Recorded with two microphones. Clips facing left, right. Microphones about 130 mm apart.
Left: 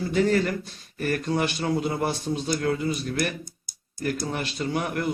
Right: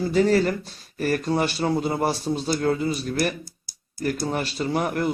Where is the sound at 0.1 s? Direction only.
35° right (ahead or behind).